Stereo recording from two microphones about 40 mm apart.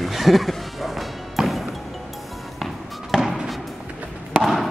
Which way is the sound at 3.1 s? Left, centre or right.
Centre.